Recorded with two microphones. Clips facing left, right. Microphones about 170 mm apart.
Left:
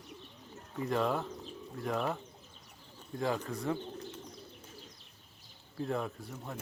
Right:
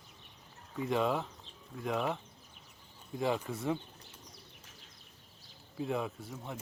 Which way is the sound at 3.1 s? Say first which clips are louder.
Right 1 dB; 15° right (ahead or behind).